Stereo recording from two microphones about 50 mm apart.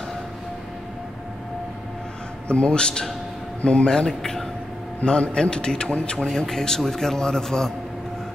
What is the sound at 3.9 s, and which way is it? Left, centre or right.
A man's voice, centre.